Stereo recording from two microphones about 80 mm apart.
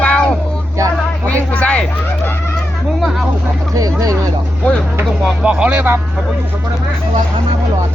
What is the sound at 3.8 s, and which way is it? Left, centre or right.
Speech, right.